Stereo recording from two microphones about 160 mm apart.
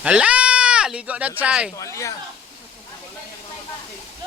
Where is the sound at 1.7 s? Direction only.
20° left (ahead or behind).